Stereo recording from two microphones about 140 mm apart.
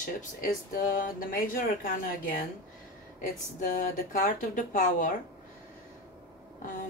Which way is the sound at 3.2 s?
75° left (ahead or behind).